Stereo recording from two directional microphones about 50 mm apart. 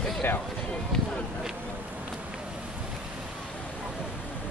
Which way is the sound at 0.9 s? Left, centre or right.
Centre.